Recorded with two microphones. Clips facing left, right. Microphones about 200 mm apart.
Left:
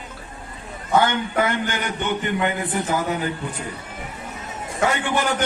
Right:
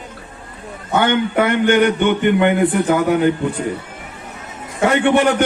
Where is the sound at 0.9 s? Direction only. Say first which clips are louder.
Right 4 dB; 65° right (ahead or behind).